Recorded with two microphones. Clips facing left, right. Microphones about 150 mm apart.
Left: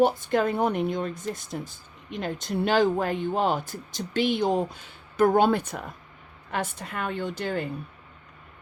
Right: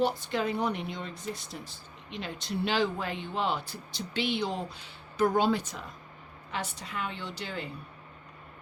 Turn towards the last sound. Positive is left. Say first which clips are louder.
# left 8 dB
turn(degrees=50)  # may be behind; listen again after turning